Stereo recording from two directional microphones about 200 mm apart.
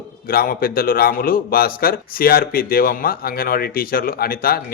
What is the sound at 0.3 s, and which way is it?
A man's voice, 45° left (ahead or behind).